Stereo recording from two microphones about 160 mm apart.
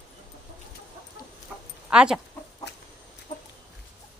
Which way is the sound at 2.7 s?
90° left.